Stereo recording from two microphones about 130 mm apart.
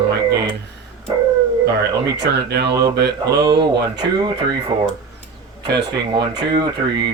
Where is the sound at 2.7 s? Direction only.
30° right (ahead or behind).